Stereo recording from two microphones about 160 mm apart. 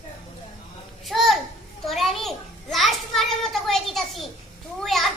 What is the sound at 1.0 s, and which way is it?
A child's voice, centre (ahead or behind).